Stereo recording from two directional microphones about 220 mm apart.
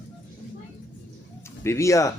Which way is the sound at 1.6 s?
15° left (ahead or behind).